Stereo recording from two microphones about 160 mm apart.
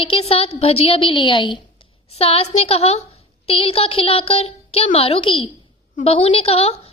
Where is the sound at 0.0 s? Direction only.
35° left (ahead or behind).